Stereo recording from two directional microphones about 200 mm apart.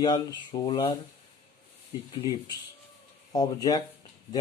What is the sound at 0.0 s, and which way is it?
Speech, 20° left (ahead or behind).